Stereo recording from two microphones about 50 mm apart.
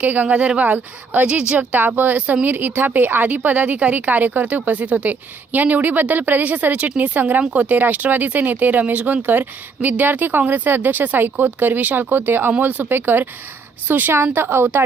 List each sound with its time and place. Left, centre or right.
0.0 s a woman's voice: right